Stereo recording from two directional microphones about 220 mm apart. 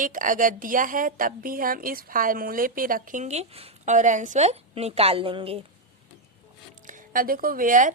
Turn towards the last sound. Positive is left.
turn(degrees=-35)  # may be behind; listen again after turning